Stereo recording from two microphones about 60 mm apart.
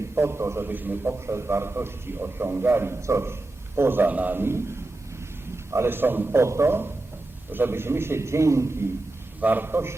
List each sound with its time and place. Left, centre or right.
0.2 s a man's voice: right
0.7 s a man's voice: right
1.3 s a man's voice: right
4.1 s a man's voice: right
4.4 s a man's voice: right
5.7 s a man's voice: right
6.4 s a man's voice: right
9.4 s a man's voice: right